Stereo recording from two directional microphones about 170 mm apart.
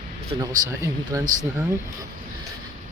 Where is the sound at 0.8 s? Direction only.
20° right (ahead or behind).